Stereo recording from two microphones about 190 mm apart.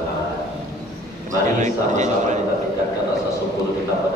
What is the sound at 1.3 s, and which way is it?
A man's voice, 40° right (ahead or behind).